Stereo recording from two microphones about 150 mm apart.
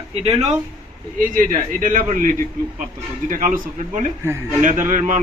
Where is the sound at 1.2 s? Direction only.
65° right (ahead or behind).